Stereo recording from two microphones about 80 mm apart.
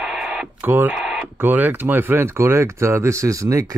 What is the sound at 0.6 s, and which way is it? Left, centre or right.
Speech, right.